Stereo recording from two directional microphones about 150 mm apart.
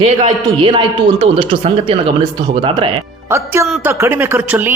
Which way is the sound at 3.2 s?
15° right (ahead or behind).